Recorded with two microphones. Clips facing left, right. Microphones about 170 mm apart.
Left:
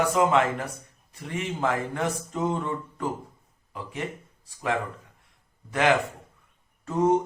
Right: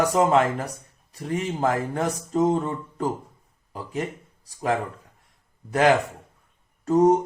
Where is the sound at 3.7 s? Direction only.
40° right (ahead or behind).